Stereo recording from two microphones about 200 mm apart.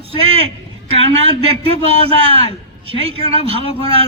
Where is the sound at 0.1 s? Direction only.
30° right (ahead or behind).